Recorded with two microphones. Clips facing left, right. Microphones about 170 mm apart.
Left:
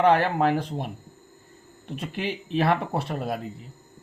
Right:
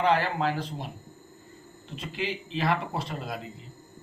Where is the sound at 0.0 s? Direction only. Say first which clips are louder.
Left 5 dB; 55° left (ahead or behind).